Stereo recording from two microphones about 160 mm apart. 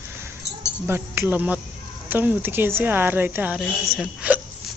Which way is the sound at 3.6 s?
Centre (ahead or behind).